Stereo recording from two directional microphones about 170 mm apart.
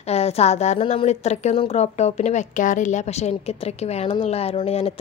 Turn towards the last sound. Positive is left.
turn(degrees=35)  # may be behind; listen again after turning